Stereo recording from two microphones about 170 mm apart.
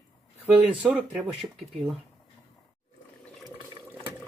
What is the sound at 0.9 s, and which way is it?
Speech, centre (ahead or behind).